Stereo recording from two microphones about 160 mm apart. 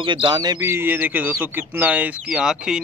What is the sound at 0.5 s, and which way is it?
Speech, 15° right (ahead or behind).